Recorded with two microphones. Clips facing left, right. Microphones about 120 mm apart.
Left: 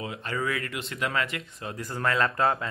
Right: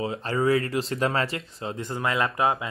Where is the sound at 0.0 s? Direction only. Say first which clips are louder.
Right 6 dB; 30° right (ahead or behind).